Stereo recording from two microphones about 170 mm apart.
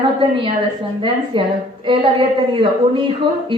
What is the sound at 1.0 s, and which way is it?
A woman's voice, 30° right (ahead or behind).